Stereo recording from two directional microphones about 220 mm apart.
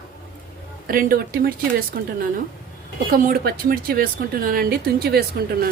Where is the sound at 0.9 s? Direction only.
40° right (ahead or behind).